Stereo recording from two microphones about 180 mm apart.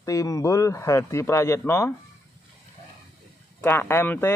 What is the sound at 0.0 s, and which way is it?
Speech, 20° left (ahead or behind).